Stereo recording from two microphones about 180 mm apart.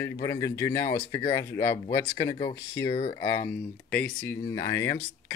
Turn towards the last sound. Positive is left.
turn(degrees=15)  # may be behind; listen again after turning